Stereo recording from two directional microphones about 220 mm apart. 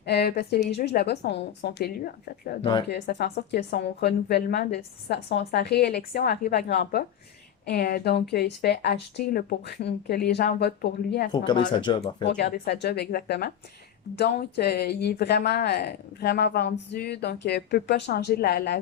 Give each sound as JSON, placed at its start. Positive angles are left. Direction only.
{"t": 0.0, "sound": "speech", "side_deg": 50}
{"t": 11.7, "sound": "speech", "side_deg": 20}
{"t": 12.2, "sound": "speech", "side_deg": 50}